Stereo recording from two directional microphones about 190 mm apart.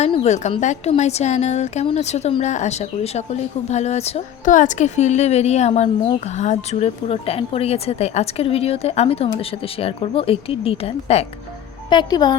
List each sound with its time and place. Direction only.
0.0 s speech: 35° left (ahead or behind)
11.9 s speech: 20° left (ahead or behind)